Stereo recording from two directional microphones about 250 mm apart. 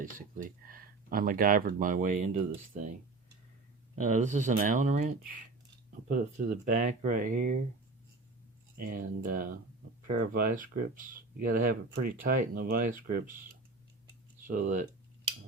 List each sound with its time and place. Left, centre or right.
0.0 s speech: right
3.9 s speech: right
8.8 s speech: right
14.4 s speech: right